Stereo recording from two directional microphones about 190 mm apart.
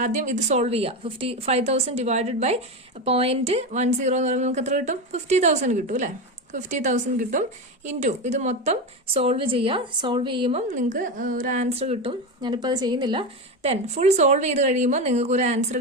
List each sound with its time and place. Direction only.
0.0 s a woman's voice: 40° right (ahead or behind)
10.7 s a woman's voice: 40° right (ahead or behind)